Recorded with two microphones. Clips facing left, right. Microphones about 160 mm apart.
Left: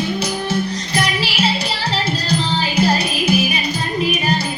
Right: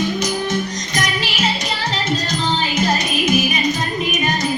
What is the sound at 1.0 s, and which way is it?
Music, 30° left (ahead or behind).